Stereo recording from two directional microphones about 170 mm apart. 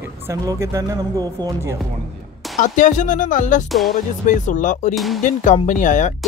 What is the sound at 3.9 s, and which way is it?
Speech, 50° left (ahead or behind).